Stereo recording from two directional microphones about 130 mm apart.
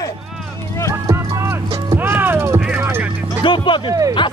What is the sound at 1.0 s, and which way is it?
Music, 20° right (ahead or behind).